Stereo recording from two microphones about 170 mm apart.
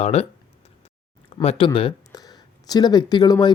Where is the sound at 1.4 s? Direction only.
35° left (ahead or behind).